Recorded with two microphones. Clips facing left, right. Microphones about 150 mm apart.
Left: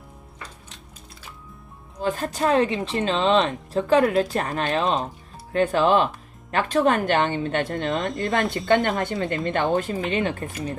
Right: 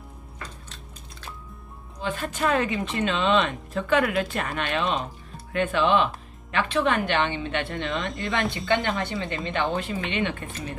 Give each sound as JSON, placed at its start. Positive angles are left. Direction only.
{"t": 2.0, "sound": "a woman's voice", "side_deg": 40}
{"t": 7.9, "sound": "speech", "side_deg": 0}
{"t": 8.4, "sound": "a woman's voice", "side_deg": 45}